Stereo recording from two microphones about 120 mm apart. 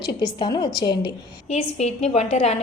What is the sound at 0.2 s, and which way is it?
Speech, 35° left (ahead or behind).